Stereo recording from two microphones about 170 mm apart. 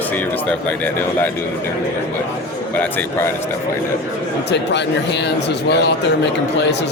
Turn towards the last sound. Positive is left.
turn(degrees=90)